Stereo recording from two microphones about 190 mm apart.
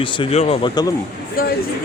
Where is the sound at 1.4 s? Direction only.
50° left (ahead or behind).